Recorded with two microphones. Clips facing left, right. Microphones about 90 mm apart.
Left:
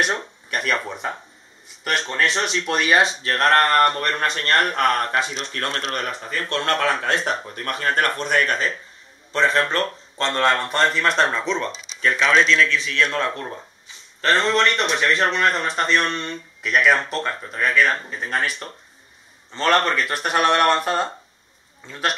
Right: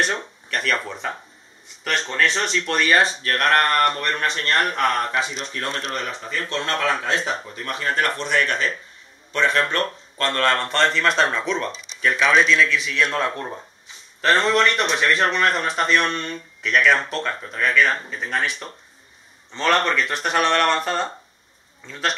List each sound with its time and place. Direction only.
0.0 s speech: 10° left (ahead or behind); by 5.2 s 50° left (ahead or behind)
5.3 s a man's voice: 60° left (ahead or behind)
5.9 s a man's voice: 50° left (ahead or behind); by 9.8 s 35° left (ahead or behind)
10.1 s speech: 20° left (ahead or behind); by 22.1 s 5° left (ahead or behind)